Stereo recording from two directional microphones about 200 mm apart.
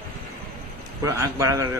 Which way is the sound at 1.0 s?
15° right (ahead or behind).